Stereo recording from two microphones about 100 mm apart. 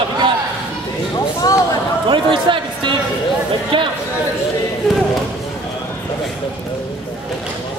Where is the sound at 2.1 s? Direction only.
55° right (ahead or behind).